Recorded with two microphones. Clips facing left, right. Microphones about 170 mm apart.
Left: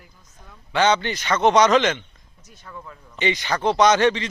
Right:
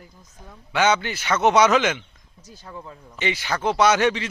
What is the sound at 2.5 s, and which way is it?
Speech, 30° right (ahead or behind).